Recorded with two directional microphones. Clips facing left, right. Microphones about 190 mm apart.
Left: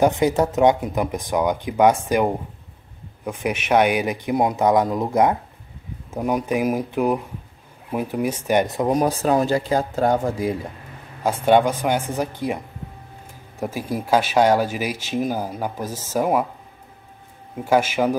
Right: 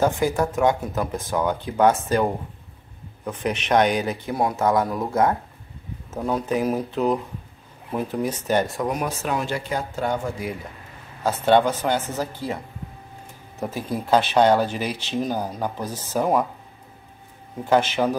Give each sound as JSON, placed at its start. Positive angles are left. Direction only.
{"t": 0.0, "sound": "speech", "side_deg": 20}
{"t": 8.9, "sound": "speech", "side_deg": 35}
{"t": 11.2, "sound": "speech", "side_deg": 10}
{"t": 13.6, "sound": "speech", "side_deg": 10}
{"t": 17.6, "sound": "speech", "side_deg": 10}